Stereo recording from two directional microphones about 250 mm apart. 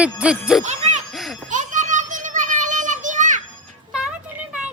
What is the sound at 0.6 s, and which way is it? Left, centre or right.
Music, right.